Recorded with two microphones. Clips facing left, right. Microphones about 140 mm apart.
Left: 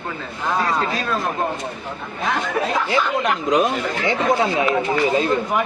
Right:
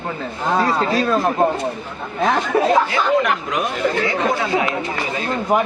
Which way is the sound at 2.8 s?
25° left (ahead or behind).